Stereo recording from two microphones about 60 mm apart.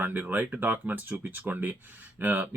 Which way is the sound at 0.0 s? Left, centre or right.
Right.